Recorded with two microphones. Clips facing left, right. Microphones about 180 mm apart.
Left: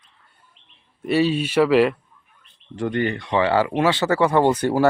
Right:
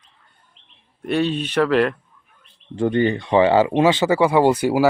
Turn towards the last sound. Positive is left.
turn(degrees=-10)  # may be behind; listen again after turning